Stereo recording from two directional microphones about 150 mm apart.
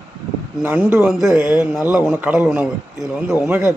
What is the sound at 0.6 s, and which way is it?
Speech, 15° right (ahead or behind).